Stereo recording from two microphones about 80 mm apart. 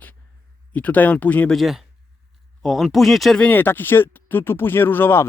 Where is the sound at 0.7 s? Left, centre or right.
Centre.